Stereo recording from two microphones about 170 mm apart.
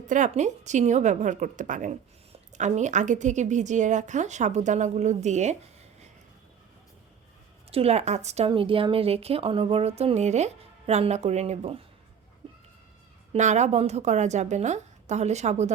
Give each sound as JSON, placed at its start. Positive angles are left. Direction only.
{"t": 0.1, "sound": "a woman's voice", "side_deg": -45}
{"t": 7.7, "sound": "speech", "side_deg": -35}
{"t": 8.4, "sound": "speech", "side_deg": -30}
{"t": 13.3, "sound": "a woman's voice", "side_deg": -45}